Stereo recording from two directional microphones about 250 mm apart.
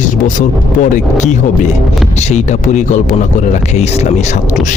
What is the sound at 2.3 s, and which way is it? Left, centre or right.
Speech, left.